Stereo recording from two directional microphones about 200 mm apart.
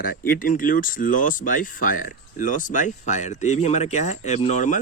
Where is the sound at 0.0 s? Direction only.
45° left (ahead or behind).